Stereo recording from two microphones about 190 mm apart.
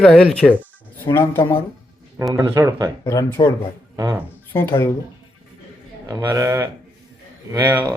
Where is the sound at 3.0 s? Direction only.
15° left (ahead or behind).